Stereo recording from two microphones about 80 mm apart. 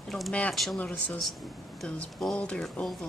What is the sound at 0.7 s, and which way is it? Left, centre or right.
Speech, left.